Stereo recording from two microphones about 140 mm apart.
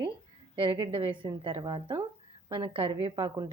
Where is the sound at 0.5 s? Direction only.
35° right (ahead or behind).